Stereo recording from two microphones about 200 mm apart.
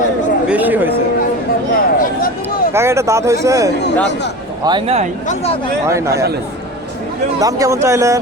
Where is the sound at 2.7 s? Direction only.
15° right (ahead or behind).